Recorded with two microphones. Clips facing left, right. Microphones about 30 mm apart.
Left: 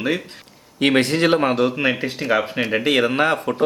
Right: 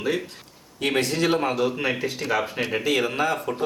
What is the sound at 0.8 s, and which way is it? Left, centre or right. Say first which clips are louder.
Speech: left 6 dB; left.